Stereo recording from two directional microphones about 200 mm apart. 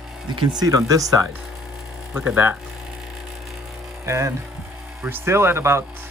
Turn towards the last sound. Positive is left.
turn(degrees=-10)  # may be behind; listen again after turning